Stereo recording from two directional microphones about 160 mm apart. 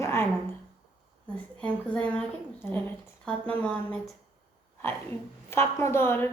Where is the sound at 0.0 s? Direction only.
15° left (ahead or behind).